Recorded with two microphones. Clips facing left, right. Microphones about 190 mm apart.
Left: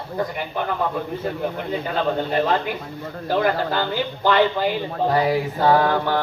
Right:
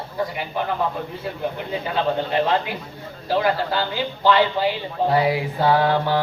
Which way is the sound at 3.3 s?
50° left (ahead or behind).